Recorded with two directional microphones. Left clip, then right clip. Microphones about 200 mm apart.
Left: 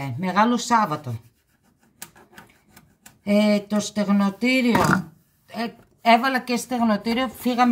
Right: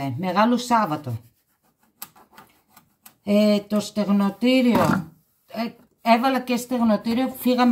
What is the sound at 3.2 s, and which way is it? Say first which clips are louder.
A woman's voice: right 1 dB; 5° left (ahead or behind).